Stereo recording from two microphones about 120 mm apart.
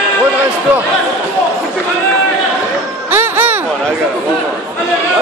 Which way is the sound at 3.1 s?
15° right (ahead or behind).